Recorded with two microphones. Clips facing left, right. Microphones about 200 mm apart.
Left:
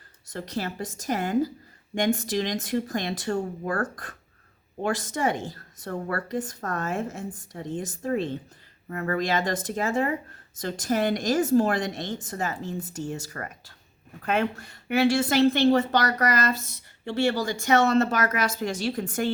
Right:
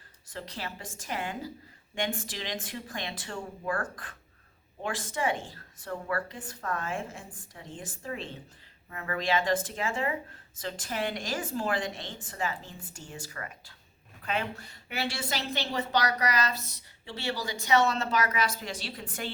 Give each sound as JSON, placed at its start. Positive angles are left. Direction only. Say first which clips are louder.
{"t": 0.3, "sound": "a woman's voice", "louder": "left 8 dB", "side_deg": 40}